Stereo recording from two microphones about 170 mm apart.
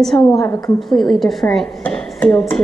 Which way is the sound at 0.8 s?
Centre (ahead or behind).